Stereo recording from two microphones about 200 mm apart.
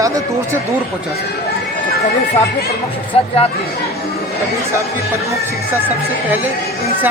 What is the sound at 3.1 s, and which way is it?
Speech, 30° left (ahead or behind).